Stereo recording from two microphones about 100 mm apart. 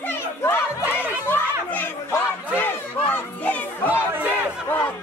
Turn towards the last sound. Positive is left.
turn(degrees=15)  # may be behind; listen again after turning